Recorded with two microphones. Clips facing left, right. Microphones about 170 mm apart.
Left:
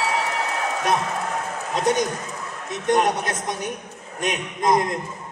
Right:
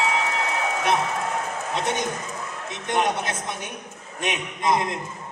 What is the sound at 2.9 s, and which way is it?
A man's voice, 40° left (ahead or behind).